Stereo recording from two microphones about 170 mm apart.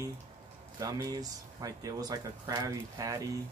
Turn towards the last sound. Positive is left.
turn(degrees=-20)  # may be behind; listen again after turning